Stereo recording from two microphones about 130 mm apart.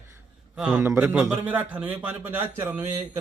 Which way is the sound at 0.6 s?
5° right (ahead or behind).